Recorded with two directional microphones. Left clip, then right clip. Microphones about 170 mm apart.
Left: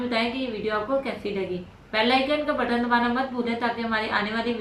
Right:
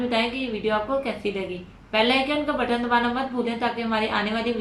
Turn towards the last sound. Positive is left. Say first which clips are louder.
# right 1 dB
turn(degrees=0)  # may be behind; listen again after turning